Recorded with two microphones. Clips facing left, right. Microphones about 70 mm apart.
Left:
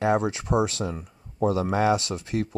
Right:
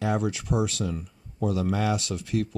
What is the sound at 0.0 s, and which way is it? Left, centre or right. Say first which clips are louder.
Speech: left 4 dB; left.